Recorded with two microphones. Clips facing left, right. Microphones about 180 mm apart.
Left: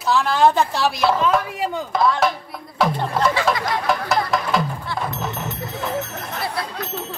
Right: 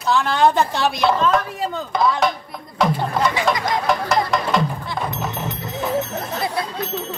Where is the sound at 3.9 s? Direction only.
Centre (ahead or behind).